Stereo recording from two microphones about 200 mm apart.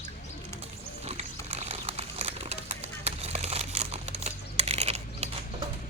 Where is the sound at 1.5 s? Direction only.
30° right (ahead or behind).